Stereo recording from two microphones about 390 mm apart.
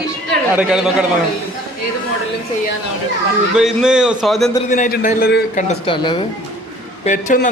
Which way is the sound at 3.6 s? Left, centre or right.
Centre.